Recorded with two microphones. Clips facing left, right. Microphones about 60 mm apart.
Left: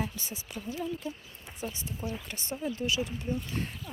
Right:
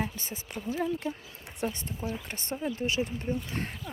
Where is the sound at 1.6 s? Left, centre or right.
Right.